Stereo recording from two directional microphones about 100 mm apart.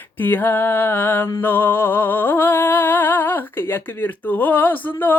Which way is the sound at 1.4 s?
20° left (ahead or behind).